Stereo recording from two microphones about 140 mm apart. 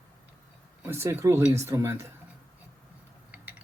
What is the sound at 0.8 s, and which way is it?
Speech, 20° right (ahead or behind).